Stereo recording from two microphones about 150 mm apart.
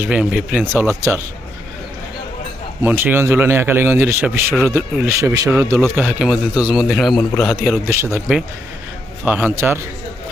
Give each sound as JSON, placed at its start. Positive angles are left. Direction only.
{"t": 0.0, "sound": "speech", "side_deg": -5}
{"t": 0.7, "sound": "speech", "side_deg": -15}
{"t": 2.8, "sound": "speech", "side_deg": -15}